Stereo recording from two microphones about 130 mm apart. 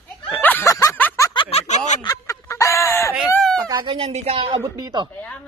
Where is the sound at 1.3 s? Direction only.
50° left (ahead or behind); by 2.0 s 65° left (ahead or behind).